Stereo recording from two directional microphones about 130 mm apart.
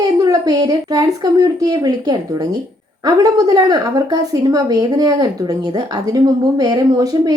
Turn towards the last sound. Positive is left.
turn(degrees=-30)  # may be behind; listen again after turning